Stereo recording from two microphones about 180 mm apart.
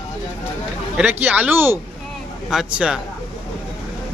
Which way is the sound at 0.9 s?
10° right (ahead or behind).